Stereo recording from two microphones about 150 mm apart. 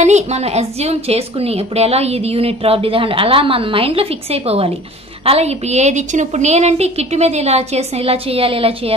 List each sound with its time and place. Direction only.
0.0 s a woman's voice: 45° right (ahead or behind)